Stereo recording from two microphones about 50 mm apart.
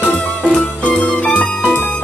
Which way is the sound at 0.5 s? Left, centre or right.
Left.